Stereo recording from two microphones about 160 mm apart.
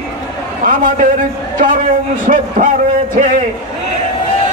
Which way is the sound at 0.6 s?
60° right (ahead or behind).